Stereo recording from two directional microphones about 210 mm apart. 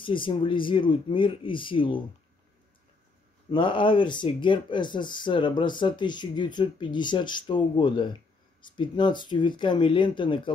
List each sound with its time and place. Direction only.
0.0 s speech: 25° left (ahead or behind)
3.5 s speech: 25° left (ahead or behind)